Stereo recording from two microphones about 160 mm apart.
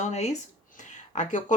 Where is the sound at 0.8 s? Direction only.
50° left (ahead or behind).